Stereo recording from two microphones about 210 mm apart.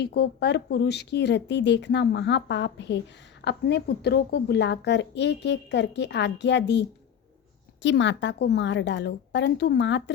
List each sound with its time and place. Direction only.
0.0 s a woman's voice: 50° left (ahead or behind)